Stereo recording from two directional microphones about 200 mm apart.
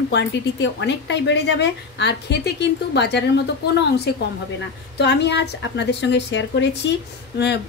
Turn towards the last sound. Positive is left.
turn(degrees=55)  # may be behind; listen again after turning